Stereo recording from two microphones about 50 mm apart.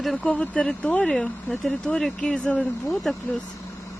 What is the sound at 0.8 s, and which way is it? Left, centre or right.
Speech, left.